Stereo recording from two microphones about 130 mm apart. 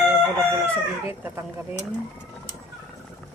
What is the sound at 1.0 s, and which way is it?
Speech, 15° right (ahead or behind).